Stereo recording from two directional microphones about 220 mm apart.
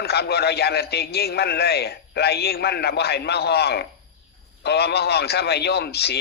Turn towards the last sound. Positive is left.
turn(degrees=45)  # may be behind; listen again after turning